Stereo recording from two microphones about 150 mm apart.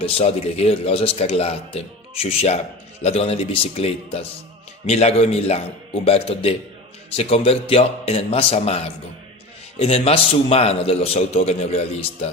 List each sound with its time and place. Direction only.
0.0 s a man's voice: 40° left (ahead or behind)
3.0 s a man's voice: 40° left (ahead or behind)